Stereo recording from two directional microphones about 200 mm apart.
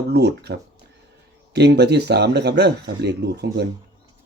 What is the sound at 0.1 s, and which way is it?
Speech, 55° right (ahead or behind).